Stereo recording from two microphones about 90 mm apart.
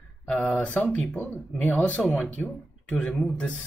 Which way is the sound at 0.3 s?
15° left (ahead or behind).